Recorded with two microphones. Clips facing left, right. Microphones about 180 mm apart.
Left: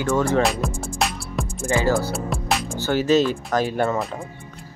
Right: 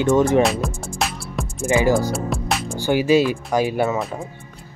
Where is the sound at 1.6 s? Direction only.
15° right (ahead or behind).